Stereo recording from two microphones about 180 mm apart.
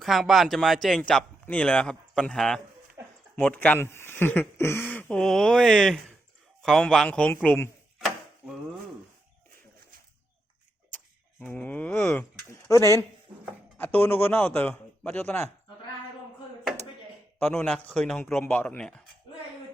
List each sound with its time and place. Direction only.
0.0 s a man's voice: centre (ahead or behind)
7.9 s chopping: centre (ahead or behind)
10.9 s a sound: 5° left (ahead or behind)
13.7 s a man's voice: 10° left (ahead or behind)
17.4 s speech: 10° left (ahead or behind)